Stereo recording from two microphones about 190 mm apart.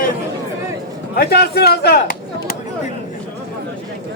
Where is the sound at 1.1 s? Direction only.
55° left (ahead or behind).